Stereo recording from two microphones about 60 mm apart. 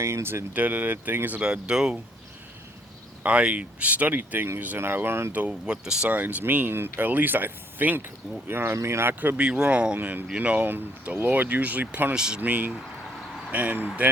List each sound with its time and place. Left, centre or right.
0.0 s speech: right
0.5 s speech: right
1.4 s speech: centre
3.2 s speech: right
5.5 s speech: centre
6.1 s speech: right
9.4 s speech: centre
12.1 s speech: centre
12.4 s speech: right